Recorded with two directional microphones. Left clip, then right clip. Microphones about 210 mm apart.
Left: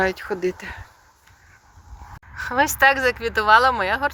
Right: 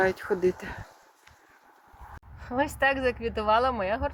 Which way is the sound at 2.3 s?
5° left (ahead or behind).